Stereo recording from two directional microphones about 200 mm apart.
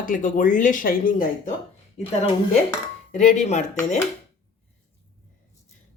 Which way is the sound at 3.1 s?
35° left (ahead or behind).